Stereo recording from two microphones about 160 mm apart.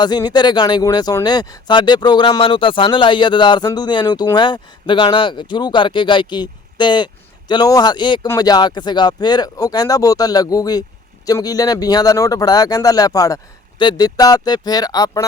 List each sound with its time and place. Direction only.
0.0 s speech: 25° left (ahead or behind)